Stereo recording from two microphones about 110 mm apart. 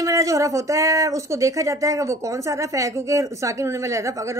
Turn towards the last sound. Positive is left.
turn(degrees=-25)  # may be behind; listen again after turning